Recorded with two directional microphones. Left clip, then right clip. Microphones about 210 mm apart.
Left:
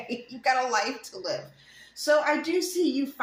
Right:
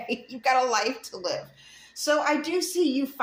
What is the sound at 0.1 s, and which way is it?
Speech, 50° right (ahead or behind).